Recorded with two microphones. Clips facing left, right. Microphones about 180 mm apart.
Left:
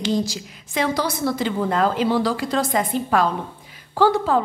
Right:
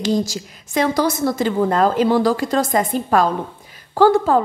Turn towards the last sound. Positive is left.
turn(degrees=-45)  # may be behind; listen again after turning